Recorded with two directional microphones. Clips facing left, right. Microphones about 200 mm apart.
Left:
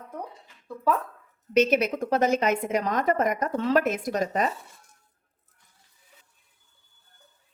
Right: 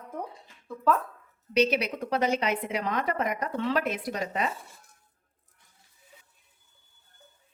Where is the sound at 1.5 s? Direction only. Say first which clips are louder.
Left 4 dB; 45° left (ahead or behind).